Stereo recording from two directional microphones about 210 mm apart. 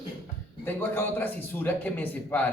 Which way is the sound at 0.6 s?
10° left (ahead or behind).